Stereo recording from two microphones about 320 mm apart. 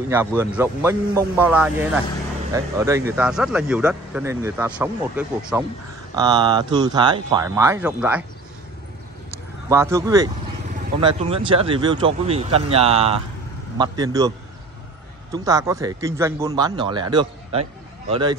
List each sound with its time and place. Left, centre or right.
0.1 s speech: centre
9.3 s speech: centre
15.3 s speech: centre